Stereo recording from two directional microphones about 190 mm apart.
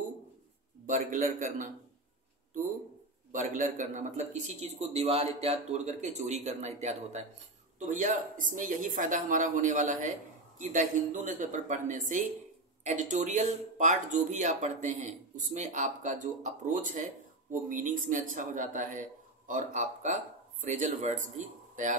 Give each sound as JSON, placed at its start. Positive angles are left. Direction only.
{"t": 0.8, "sound": "a man's voice", "side_deg": -40}
{"t": 3.3, "sound": "a man's voice", "side_deg": -45}